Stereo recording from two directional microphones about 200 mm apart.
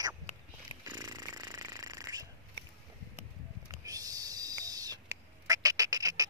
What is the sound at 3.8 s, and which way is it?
Owl, 15° right (ahead or behind).